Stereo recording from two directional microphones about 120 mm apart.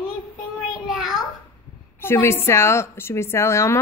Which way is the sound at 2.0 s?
20° left (ahead or behind).